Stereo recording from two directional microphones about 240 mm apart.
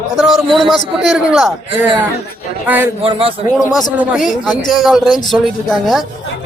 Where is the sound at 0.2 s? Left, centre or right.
Centre.